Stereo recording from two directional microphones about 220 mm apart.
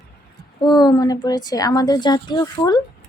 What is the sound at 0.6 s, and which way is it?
A woman's voice, 20° left (ahead or behind).